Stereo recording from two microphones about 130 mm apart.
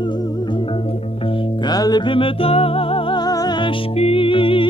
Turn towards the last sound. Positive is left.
turn(degrees=45)  # may be behind; listen again after turning